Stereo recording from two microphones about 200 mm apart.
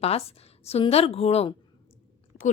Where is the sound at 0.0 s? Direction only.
30° left (ahead or behind).